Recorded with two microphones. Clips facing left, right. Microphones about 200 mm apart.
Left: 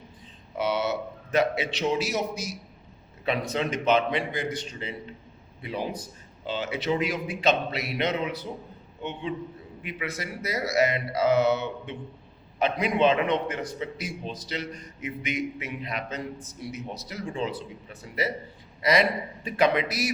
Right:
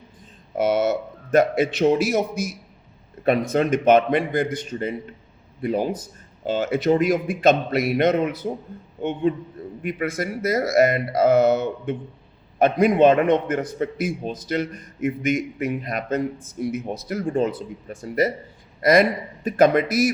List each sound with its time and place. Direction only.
0.5 s a man's voice: 50° right (ahead or behind)